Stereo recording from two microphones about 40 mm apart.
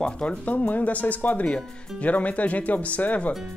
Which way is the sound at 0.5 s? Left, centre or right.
Left.